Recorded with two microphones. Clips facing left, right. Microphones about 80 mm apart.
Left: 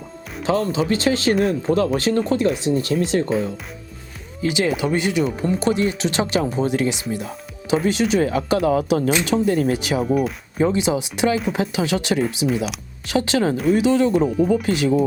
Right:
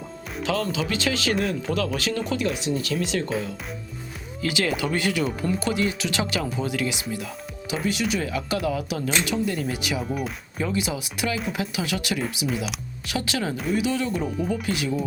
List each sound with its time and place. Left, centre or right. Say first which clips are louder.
0.4 s speech: left 6 dB; left
4.4 s speech: left 5 dB; left
7.1 s music: left 4 dB; left
7.9 s speech: left 5 dB; left
12.5 s speech: left 6 dB; centre
13.1 s speech: left 8 dB; left